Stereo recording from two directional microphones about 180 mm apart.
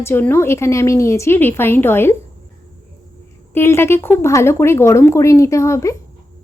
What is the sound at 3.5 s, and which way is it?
A woman's voice, 15° left (ahead or behind).